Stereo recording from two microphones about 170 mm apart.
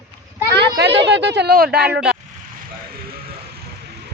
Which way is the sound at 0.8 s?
90° right.